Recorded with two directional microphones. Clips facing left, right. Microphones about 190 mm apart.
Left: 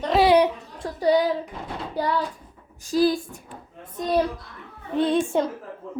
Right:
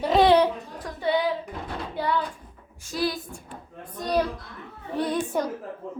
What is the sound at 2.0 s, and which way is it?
A woman's voice, 40° left (ahead or behind).